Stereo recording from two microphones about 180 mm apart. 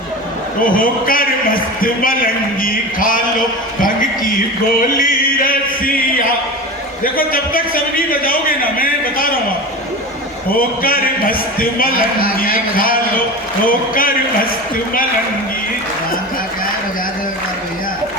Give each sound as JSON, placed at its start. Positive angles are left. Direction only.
{"t": 0.6, "sound": "a man's voice", "side_deg": 50}
{"t": 4.9, "sound": "music", "side_deg": 50}
{"t": 7.0, "sound": "a man's voice", "side_deg": 55}
{"t": 10.5, "sound": "a man's voice", "side_deg": 55}